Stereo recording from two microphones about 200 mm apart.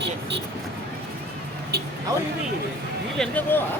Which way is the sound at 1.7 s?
55° right (ahead or behind).